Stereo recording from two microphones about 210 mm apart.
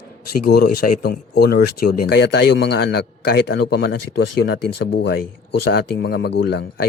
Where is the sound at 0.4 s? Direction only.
50° left (ahead or behind).